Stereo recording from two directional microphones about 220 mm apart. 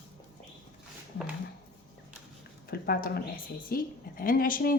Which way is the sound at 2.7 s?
40° left (ahead or behind).